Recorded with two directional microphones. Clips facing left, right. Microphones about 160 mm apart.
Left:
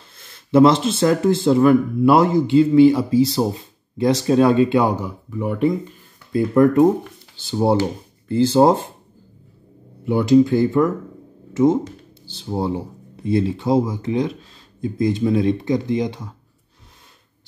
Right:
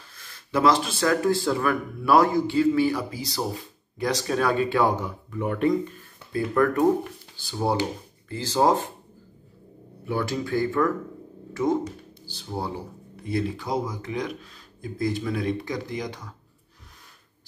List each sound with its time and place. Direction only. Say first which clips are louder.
0.1 s speech: left 10 dB; 25° left (ahead or behind); by 5.9 s 10° left (ahead or behind)
6.3 s speech: left 8 dB; 20° left (ahead or behind)
10.0 s speech: left 13 dB; 20° left (ahead or behind)